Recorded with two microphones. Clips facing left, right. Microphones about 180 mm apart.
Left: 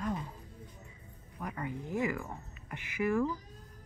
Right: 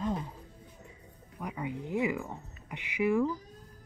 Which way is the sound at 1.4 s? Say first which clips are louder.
Right 2 dB; 15° right (ahead or behind).